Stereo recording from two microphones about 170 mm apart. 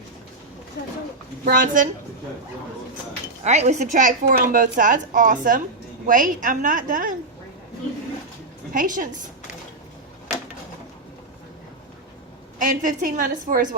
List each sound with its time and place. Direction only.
1.5 s a woman's voice: 55° right (ahead or behind)
3.4 s a woman's voice: 40° right (ahead or behind)
8.7 s a woman's voice: 50° right (ahead or behind)
12.5 s a woman's voice: 50° right (ahead or behind)